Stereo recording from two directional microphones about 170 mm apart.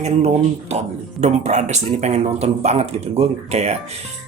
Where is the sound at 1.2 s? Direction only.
40° right (ahead or behind).